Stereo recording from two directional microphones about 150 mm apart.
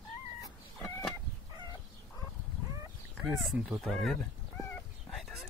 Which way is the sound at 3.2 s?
5° right (ahead or behind).